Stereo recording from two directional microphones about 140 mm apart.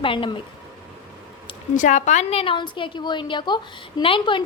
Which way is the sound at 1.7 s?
65° left (ahead or behind).